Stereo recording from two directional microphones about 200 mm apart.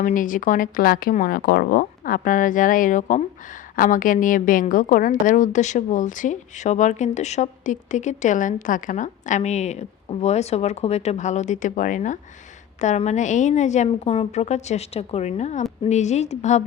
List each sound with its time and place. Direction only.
0.0 s a woman's voice: 40° left (ahead or behind)